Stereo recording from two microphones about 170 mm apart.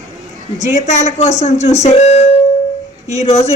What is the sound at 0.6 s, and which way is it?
A woman's voice, 45° left (ahead or behind).